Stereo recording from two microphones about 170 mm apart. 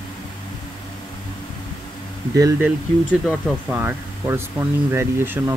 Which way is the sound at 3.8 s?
15° right (ahead or behind).